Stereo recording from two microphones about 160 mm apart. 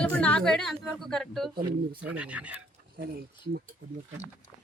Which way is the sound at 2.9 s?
70° right (ahead or behind).